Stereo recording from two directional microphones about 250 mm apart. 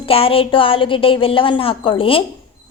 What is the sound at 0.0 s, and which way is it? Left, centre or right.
A woman's voice, left.